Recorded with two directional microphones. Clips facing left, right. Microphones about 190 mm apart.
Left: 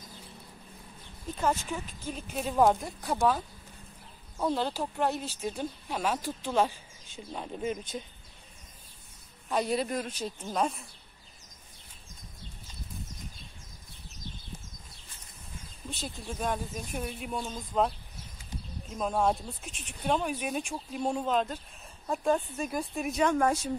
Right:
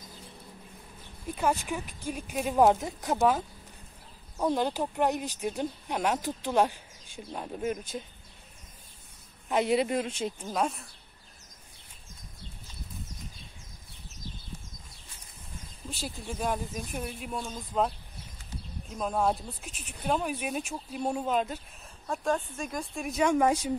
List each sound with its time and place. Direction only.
1.2 s speech: 10° right (ahead or behind)
2.8 s speech: 20° right (ahead or behind)
9.5 s speech: 20° right (ahead or behind)
10.4 s speech: 5° right (ahead or behind)
15.9 s speech: 5° right (ahead or behind)
22.0 s speech: 5° left (ahead or behind)
23.2 s speech: 15° right (ahead or behind)